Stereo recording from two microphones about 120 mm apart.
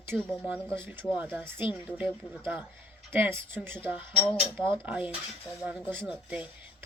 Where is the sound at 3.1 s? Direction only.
20° right (ahead or behind).